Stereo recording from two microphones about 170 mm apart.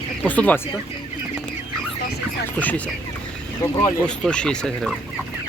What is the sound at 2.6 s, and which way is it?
Speech, 10° left (ahead or behind).